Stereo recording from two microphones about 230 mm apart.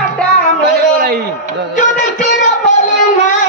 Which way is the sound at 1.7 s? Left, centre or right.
Left.